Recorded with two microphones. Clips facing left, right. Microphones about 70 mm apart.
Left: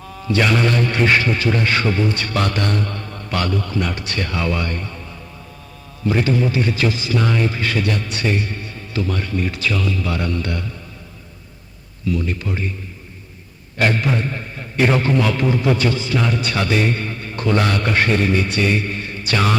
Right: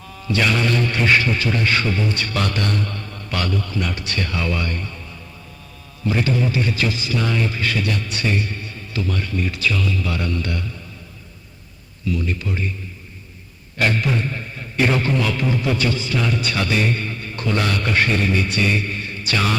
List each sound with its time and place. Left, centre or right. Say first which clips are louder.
0.3 s a man's voice: left 2 dB; left
6.1 s a man's voice: left 2 dB; left
12.1 s a man's voice: left 1 dB; left
13.7 s a man's voice: left 2 dB; left